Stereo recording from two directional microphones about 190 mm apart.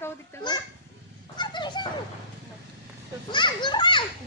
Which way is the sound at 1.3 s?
25° left (ahead or behind).